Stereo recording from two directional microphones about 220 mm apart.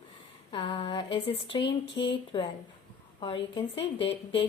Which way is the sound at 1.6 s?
55° left (ahead or behind).